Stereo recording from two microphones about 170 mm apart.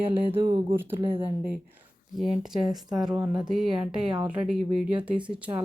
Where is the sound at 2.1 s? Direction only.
Centre (ahead or behind).